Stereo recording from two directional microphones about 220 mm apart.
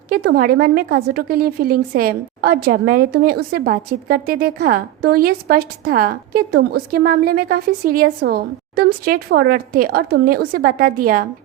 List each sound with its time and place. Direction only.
0.1 s a woman's voice: 45° right (ahead or behind)